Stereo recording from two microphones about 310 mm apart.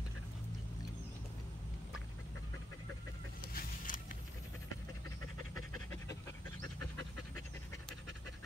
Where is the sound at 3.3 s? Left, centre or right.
Left.